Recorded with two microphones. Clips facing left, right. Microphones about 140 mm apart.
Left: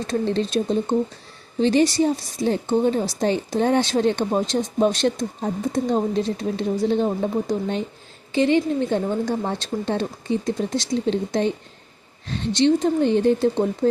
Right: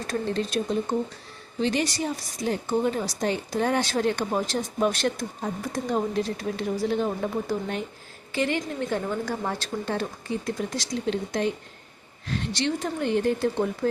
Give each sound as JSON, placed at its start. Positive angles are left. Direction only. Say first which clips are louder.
{"t": 0.1, "sound": "a woman's voice", "louder": "left 5 dB", "side_deg": 25}